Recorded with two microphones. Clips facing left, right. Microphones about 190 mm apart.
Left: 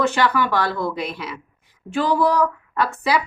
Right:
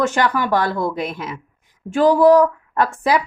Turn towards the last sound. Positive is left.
turn(degrees=-45)  # may be behind; listen again after turning